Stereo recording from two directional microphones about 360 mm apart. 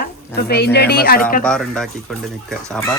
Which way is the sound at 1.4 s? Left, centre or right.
Centre.